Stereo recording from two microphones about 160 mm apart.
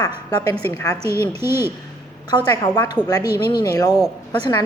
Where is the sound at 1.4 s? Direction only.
15° right (ahead or behind).